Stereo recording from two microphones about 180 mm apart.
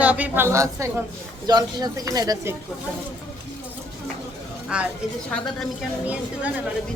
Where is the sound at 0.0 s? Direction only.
10° right (ahead or behind).